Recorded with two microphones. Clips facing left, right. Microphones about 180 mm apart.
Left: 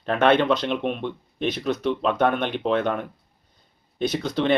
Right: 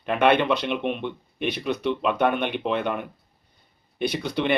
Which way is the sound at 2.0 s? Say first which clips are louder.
Even; 10° right (ahead or behind).